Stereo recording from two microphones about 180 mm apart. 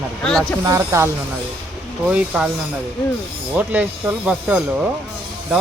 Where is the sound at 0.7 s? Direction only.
15° right (ahead or behind).